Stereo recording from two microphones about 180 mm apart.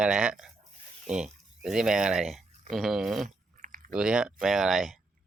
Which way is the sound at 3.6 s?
45° right (ahead or behind).